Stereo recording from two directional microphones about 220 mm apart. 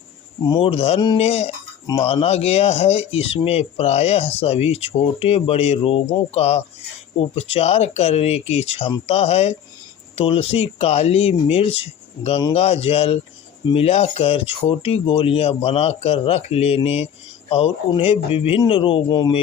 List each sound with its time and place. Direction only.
0.4 s speech: 20° left (ahead or behind)